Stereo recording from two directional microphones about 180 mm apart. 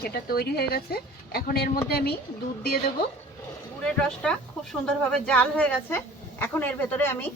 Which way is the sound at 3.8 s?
5° left (ahead or behind).